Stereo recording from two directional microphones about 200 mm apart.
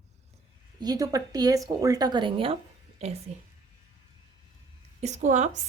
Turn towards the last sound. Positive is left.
turn(degrees=-35)  # may be behind; listen again after turning